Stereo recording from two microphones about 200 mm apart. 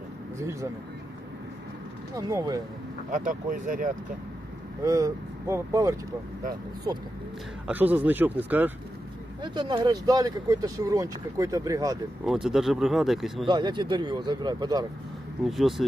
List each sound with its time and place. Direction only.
0.3 s speech: 15° right (ahead or behind)
2.1 s speech: 15° right (ahead or behind)
3.1 s speech: 40° right (ahead or behind)
4.8 s speech: 15° right (ahead or behind)
7.7 s speech: 10° right (ahead or behind)
9.4 s speech: 25° right (ahead or behind)
12.2 s speech: centre (ahead or behind)
13.5 s speech: 20° right (ahead or behind)
15.4 s speech: centre (ahead or behind)